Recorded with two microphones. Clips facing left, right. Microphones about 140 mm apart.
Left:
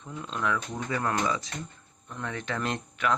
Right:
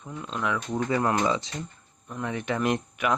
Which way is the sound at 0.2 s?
5° right (ahead or behind).